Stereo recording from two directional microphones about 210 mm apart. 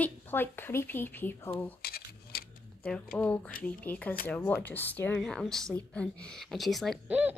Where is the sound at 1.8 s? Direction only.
45° left (ahead or behind).